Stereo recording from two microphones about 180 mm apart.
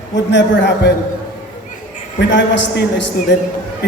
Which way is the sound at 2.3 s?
80° left.